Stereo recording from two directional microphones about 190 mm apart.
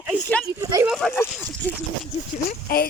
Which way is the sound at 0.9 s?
Centre (ahead or behind).